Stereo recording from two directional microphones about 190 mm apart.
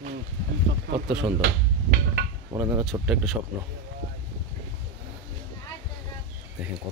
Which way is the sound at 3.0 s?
5° right (ahead or behind).